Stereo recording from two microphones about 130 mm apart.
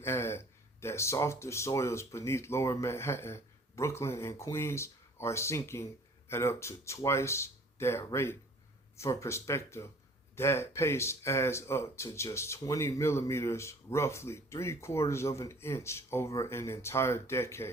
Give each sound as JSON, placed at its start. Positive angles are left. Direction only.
{"t": 0.0, "sound": "speech", "side_deg": 20}